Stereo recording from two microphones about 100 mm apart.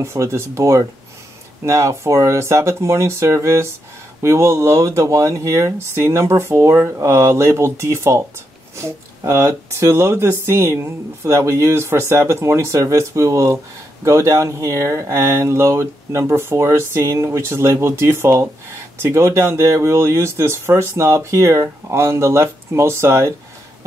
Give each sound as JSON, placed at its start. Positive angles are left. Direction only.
{"t": 0.0, "sound": "speech", "side_deg": -30}